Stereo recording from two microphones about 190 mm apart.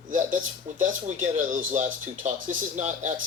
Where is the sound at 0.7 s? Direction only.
35° right (ahead or behind).